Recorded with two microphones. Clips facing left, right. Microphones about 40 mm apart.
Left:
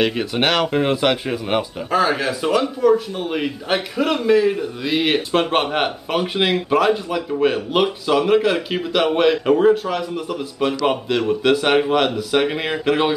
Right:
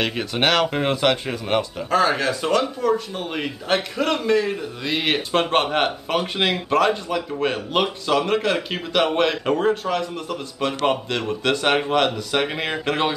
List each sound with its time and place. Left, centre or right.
0.0 s speech: centre